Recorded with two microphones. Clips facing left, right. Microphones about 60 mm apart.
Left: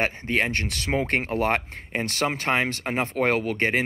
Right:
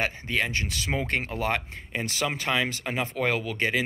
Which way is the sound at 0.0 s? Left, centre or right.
Left.